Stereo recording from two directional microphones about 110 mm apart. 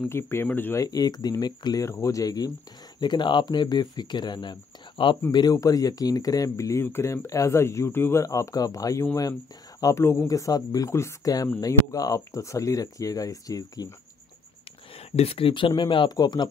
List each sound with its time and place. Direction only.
0.1 s speech: 20° left (ahead or behind)
0.7 s speech: 35° left (ahead or behind)
5.3 s speech: 35° left (ahead or behind)
15.0 s speech: 65° left (ahead or behind); by 16.4 s 40° left (ahead or behind)